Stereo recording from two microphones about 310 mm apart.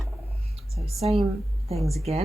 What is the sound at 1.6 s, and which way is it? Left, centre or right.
Speech, centre.